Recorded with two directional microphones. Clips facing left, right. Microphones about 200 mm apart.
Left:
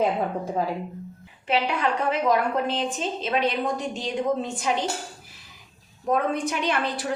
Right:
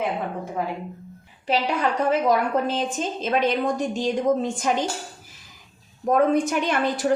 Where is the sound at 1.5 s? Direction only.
40° right (ahead or behind).